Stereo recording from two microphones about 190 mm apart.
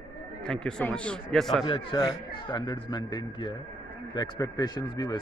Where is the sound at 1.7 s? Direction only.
25° left (ahead or behind).